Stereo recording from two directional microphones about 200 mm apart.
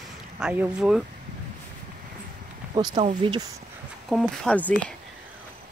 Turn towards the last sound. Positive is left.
turn(degrees=5)  # may be behind; listen again after turning